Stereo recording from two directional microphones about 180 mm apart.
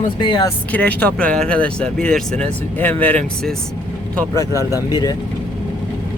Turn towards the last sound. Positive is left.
turn(degrees=-15)  # may be behind; listen again after turning